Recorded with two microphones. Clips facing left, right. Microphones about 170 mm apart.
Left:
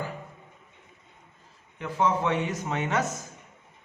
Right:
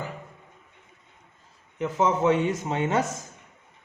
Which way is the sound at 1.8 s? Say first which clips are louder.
Right 3 dB; 20° right (ahead or behind).